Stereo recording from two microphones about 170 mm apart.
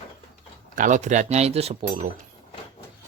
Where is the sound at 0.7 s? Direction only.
50° right (ahead or behind).